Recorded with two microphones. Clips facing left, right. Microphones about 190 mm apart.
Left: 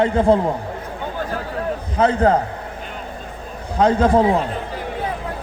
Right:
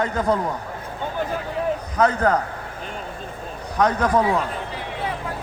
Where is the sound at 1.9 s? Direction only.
30° left (ahead or behind).